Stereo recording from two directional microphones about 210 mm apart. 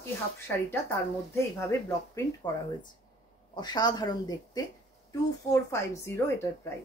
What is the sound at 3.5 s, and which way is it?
Speech, 20° left (ahead or behind).